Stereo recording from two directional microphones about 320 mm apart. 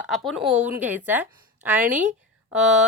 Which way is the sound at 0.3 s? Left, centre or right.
Centre.